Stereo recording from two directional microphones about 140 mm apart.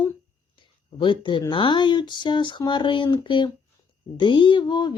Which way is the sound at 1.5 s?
35° left (ahead or behind).